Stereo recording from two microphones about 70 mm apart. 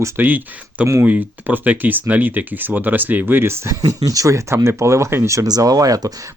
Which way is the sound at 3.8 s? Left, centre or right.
Right.